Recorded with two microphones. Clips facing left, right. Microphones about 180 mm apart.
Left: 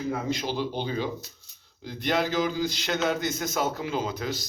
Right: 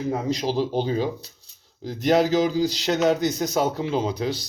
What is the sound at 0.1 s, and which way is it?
A man's voice, 35° right (ahead or behind).